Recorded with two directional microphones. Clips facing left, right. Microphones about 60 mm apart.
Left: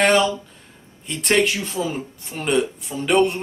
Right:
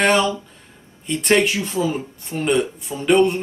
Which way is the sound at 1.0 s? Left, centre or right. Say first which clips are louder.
Right 4 dB; centre.